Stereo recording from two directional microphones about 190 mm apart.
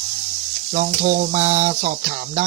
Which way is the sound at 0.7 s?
40° right (ahead or behind).